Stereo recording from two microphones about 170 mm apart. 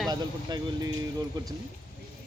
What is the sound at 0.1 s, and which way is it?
Speech, 25° right (ahead or behind).